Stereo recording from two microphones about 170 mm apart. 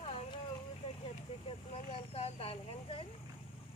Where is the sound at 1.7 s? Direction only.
35° left (ahead or behind).